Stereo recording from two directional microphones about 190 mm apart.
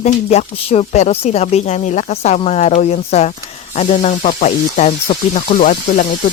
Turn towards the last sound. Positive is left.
turn(degrees=45)  # may be behind; listen again after turning